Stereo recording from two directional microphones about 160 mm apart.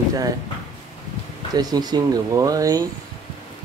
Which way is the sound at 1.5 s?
25° right (ahead or behind).